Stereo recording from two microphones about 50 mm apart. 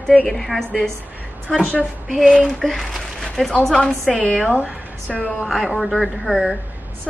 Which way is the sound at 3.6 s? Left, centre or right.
Centre.